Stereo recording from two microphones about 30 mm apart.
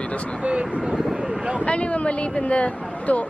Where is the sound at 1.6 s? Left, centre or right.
Left.